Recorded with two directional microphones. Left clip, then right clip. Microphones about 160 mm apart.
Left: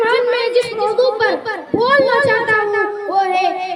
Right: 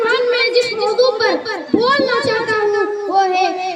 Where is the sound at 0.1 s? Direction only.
55° right (ahead or behind).